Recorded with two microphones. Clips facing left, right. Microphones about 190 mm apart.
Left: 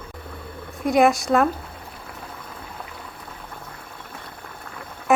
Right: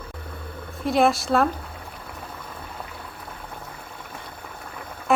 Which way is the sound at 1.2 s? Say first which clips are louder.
Left 2 dB; centre (ahead or behind).